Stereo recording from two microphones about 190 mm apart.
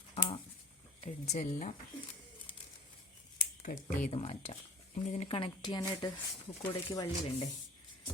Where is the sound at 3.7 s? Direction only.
50° left (ahead or behind).